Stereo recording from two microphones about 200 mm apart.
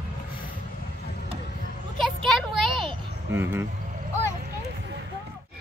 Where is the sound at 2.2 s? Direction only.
Centre (ahead or behind).